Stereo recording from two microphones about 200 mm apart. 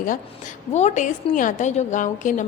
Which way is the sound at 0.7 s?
35° left (ahead or behind).